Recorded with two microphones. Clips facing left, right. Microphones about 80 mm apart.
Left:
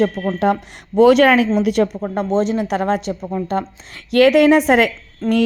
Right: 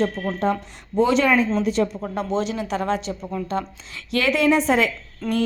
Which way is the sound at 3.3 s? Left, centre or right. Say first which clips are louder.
Left 5 dB; left.